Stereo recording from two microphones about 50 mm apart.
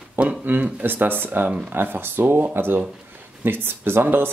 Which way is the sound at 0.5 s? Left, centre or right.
Right.